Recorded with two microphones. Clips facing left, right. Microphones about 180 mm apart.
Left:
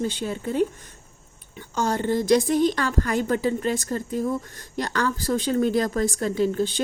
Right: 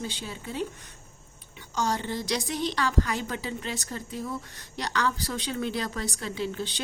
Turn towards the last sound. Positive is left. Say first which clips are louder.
# left 9 dB
turn(degrees=45)  # may be behind; listen again after turning